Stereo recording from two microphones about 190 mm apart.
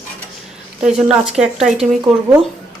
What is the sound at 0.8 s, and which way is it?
Speech, 5° right (ahead or behind).